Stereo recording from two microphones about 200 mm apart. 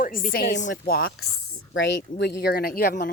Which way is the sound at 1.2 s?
90° left.